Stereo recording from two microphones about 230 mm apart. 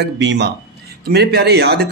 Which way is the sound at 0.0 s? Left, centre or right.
Right.